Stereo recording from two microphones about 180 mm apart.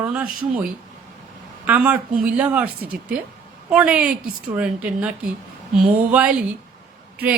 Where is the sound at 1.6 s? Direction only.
10° right (ahead or behind).